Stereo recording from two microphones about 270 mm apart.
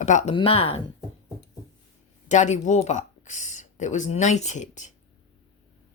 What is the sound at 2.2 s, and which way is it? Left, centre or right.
Speech, left.